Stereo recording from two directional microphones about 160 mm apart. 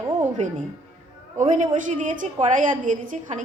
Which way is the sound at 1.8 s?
55° right (ahead or behind).